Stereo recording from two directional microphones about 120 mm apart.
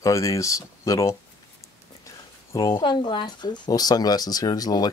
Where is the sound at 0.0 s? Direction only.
25° left (ahead or behind).